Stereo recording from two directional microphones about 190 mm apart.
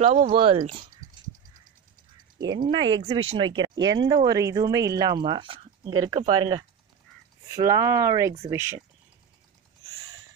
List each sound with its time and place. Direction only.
0.0 s speech: 35° right (ahead or behind)
2.3 s a sound: 20° right (ahead or behind)
3.1 s speech: 30° right (ahead or behind); by 8.8 s 15° right (ahead or behind)